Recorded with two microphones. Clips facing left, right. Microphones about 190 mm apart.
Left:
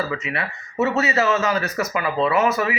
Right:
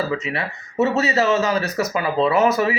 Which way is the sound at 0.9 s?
35° right (ahead or behind).